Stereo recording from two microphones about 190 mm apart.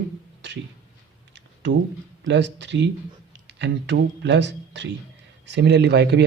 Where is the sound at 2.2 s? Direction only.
70° right (ahead or behind).